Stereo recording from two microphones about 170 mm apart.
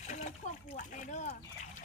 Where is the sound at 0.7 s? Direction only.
50° left (ahead or behind).